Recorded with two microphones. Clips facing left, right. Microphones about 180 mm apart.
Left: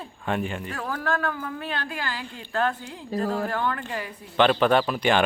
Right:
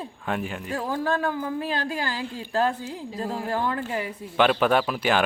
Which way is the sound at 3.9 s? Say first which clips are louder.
Left 1 dB; 5° right (ahead or behind).